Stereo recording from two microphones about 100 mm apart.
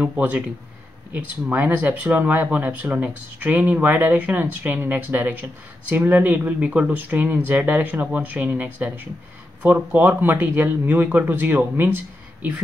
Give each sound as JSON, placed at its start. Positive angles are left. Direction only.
{"t": 0.0, "sound": "speech", "side_deg": -15}